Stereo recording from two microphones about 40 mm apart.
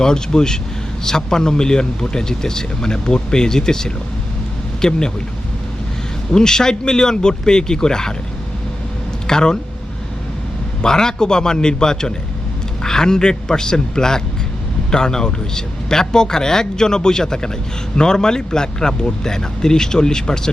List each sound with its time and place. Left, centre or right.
0.0 s speech: centre
6.3 s speech: centre
9.2 s speech: centre
10.8 s speech: centre